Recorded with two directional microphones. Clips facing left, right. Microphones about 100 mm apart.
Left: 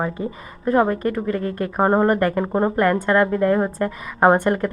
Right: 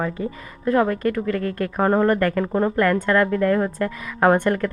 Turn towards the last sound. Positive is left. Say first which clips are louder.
# left 1 dB
turn(degrees=20)  # may be behind; listen again after turning